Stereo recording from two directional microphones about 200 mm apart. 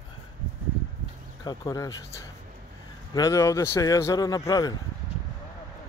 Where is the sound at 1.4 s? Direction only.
20° left (ahead or behind).